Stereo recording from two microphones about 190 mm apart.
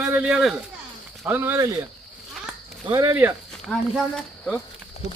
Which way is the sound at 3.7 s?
Centre (ahead or behind).